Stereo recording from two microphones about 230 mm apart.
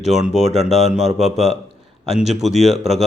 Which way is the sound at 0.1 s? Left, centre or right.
Right.